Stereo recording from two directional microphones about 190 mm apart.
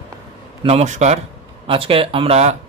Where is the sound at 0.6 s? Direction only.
35° right (ahead or behind).